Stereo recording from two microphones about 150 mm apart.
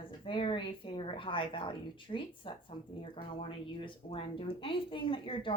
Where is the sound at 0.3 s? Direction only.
35° left (ahead or behind).